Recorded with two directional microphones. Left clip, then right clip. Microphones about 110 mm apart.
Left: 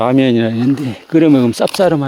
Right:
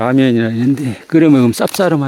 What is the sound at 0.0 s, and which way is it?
Speech, 5° right (ahead or behind).